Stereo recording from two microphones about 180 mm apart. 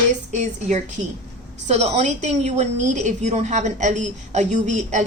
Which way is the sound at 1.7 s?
40° right (ahead or behind).